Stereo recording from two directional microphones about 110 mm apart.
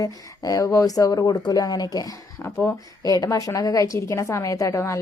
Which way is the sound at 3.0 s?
35° left (ahead or behind).